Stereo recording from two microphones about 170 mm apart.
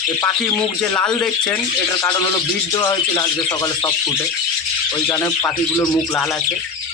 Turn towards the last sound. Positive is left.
turn(degrees=15)  # may be behind; listen again after turning